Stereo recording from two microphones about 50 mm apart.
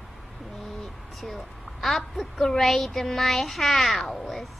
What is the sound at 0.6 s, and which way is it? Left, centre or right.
Speech, centre.